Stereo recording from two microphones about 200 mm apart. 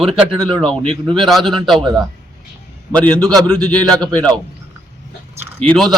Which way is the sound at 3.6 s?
5° left (ahead or behind).